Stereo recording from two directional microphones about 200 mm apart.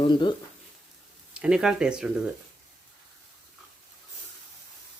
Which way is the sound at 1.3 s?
5° right (ahead or behind).